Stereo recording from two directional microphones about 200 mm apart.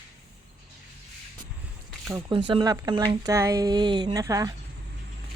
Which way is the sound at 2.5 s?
20° right (ahead or behind).